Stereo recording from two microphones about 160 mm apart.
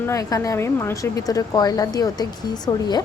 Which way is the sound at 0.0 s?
20° left (ahead or behind).